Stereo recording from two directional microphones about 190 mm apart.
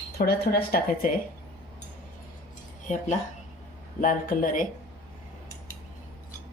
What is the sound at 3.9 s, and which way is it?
Speech, 45° left (ahead or behind).